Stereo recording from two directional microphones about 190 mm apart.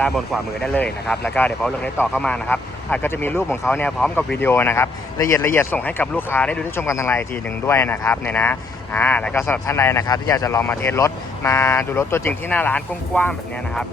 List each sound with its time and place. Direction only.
0.0 s speech: 5° left (ahead or behind)